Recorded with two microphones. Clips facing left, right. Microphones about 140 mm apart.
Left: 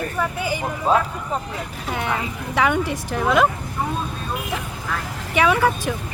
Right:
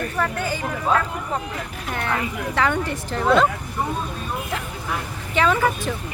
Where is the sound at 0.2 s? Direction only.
10° left (ahead or behind).